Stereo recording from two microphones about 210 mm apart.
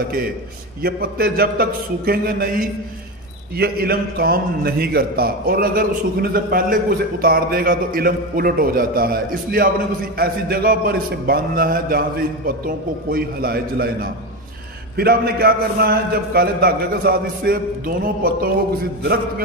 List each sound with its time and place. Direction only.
0.8 s a man's voice: 45° right (ahead or behind)